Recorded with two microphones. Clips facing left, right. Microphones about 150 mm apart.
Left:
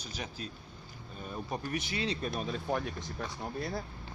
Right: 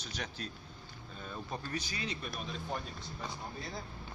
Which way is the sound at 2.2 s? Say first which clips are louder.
Left 6 dB; 50° left (ahead or behind).